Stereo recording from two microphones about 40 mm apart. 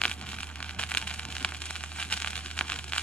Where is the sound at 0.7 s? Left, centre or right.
Left.